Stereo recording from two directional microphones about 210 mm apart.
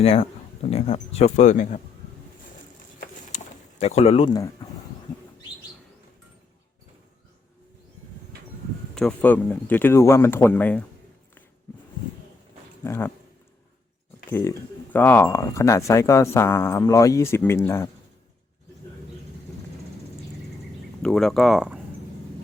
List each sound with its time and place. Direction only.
0.0 s speech: 25° left (ahead or behind)
3.0 s a sound: 30° left (ahead or behind)
9.0 s speech: 5° left (ahead or behind)
12.8 s speech: 10° left (ahead or behind)
14.3 s speech: 10° left (ahead or behind)
21.0 s speech: centre (ahead or behind)